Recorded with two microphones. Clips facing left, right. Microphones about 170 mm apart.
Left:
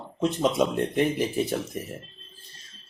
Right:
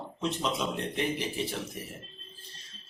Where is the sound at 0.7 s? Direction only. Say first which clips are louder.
Left 7 dB; 50° left (ahead or behind).